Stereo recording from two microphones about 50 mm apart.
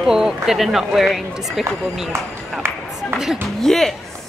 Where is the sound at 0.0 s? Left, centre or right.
Centre.